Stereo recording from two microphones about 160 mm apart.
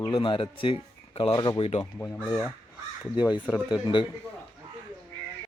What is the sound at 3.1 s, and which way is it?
Speech, 25° left (ahead or behind).